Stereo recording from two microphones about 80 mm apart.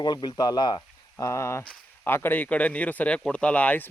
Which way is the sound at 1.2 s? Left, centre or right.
Left.